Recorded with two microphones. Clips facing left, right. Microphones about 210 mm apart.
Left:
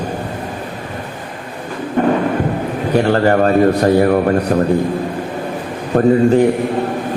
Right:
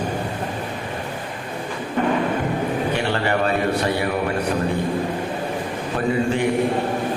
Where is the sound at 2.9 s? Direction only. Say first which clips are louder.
Left 14 dB; 45° left (ahead or behind).